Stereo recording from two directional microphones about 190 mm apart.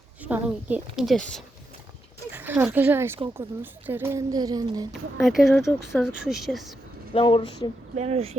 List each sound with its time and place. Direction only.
0.2 s speech: 10° right (ahead or behind)
2.3 s speech: 10° right (ahead or behind)
5.2 s speech: centre (ahead or behind)
7.1 s speech: 30° left (ahead or behind)
7.9 s speech: 35° right (ahead or behind)